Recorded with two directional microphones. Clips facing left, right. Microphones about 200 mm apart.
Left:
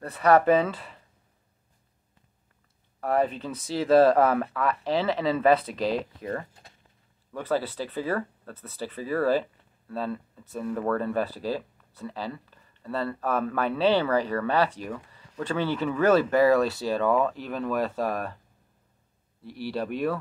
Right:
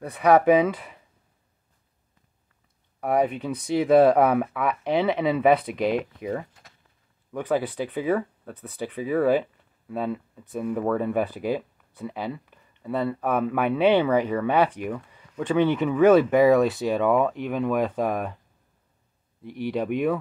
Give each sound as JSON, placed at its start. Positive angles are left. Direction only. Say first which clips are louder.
{"t": 0.0, "sound": "speech", "louder": "right 2 dB", "side_deg": -15}
{"t": 3.0, "sound": "speech", "louder": "right 2 dB", "side_deg": -15}
{"t": 6.6, "sound": "a sound", "louder": "left 1 dB", "side_deg": 30}
{"t": 7.3, "sound": "speech", "louder": "right 3 dB", "side_deg": -15}
{"t": 19.4, "sound": "speech", "louder": "right 4 dB", "side_deg": -20}